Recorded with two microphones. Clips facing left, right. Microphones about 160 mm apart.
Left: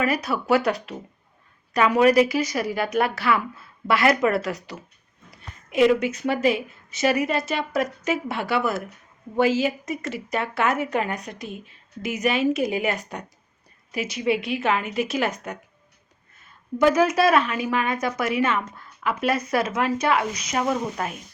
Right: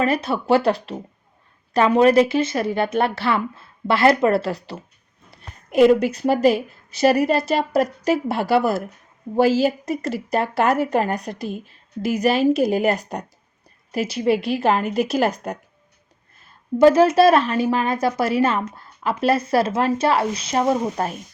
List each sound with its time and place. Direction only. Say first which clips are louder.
0.0 s a woman's voice: right 3 dB; 25° right (ahead or behind)
5.8 s a woman's voice: right 4 dB; 40° right (ahead or behind)
16.7 s a woman's voice: right 6 dB; 30° right (ahead or behind)